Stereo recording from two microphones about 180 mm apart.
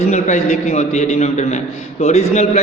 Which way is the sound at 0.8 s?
40° left (ahead or behind).